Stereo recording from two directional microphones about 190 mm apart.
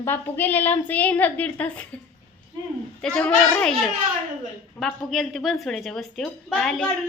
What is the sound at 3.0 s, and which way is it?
A woman's voice, 5° left (ahead or behind).